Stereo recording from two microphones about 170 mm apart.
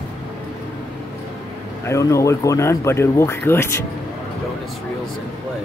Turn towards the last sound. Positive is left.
turn(degrees=15)  # may be behind; listen again after turning